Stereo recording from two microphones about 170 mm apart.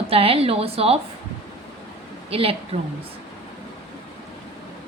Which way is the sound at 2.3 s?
35° right (ahead or behind).